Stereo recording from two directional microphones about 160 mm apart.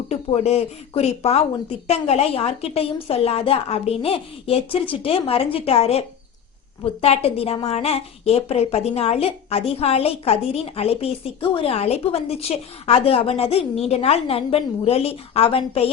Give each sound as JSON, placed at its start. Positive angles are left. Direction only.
{"t": 0.1, "sound": "a woman's voice", "side_deg": 40}